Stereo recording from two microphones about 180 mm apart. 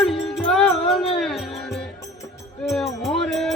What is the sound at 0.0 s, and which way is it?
Music, centre (ahead or behind).